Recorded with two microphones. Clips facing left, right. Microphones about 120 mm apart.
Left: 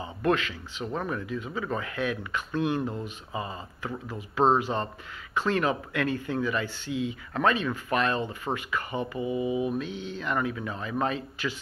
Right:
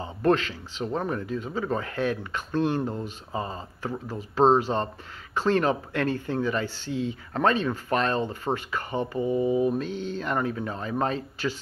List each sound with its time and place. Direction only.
0.0 s speech: 35° right (ahead or behind)